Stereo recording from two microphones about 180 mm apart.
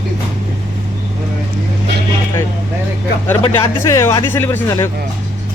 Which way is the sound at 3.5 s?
15° left (ahead or behind).